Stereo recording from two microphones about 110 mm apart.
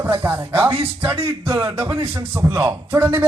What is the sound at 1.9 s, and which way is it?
Speech, 25° right (ahead or behind).